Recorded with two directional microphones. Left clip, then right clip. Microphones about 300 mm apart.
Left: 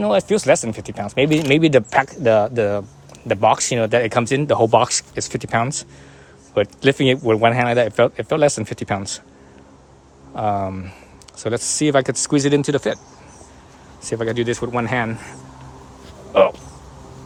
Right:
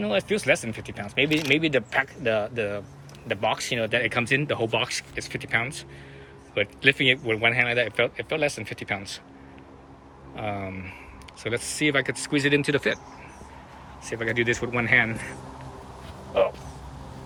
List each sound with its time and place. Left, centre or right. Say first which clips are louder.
0.0 s speech: left 8 dB; centre
10.3 s speech: left 11 dB; centre
14.1 s speech: left 4 dB; centre